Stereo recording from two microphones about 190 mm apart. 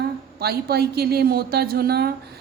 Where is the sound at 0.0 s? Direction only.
55° right (ahead or behind).